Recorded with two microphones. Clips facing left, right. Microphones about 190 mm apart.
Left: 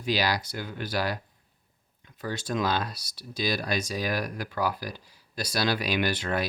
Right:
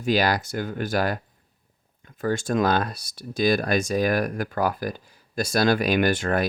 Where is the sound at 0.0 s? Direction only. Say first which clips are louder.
Right 5 dB; 50° right (ahead or behind).